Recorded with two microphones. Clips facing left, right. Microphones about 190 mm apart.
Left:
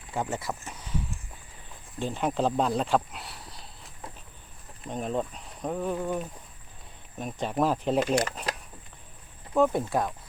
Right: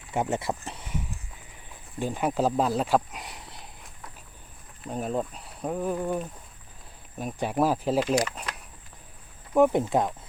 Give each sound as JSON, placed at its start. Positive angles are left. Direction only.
{"t": 0.1, "sound": "speech", "side_deg": -20}
{"t": 2.0, "sound": "speech", "side_deg": -10}
{"t": 4.9, "sound": "speech", "side_deg": -5}
{"t": 9.6, "sound": "speech", "side_deg": -15}